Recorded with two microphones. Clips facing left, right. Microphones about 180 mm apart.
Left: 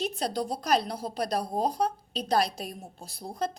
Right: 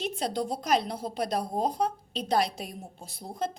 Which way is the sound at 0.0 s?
25° right (ahead or behind).